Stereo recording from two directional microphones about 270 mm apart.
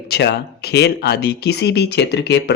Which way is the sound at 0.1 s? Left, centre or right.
Left.